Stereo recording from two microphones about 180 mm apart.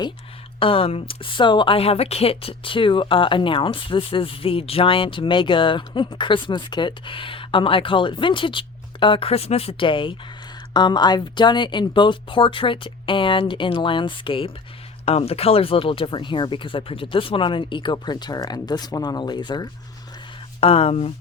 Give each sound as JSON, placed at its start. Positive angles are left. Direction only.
{"t": 0.6, "sound": "speech", "side_deg": 30}